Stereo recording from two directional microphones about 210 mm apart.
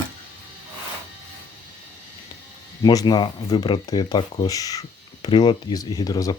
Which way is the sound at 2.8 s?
20° left (ahead or behind).